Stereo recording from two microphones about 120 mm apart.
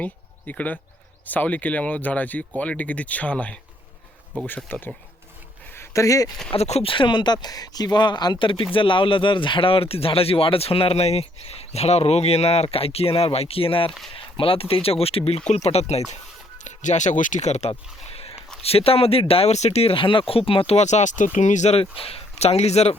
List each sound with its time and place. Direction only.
0.0 s speech: 10° left (ahead or behind)
5.7 s a sound: 25° left (ahead or behind)
6.5 s speech: 60° left (ahead or behind)
6.9 s speech: 40° left (ahead or behind); by 16.0 s 60° left (ahead or behind)
16.6 s speech: 90° left; by 23.0 s 65° left (ahead or behind)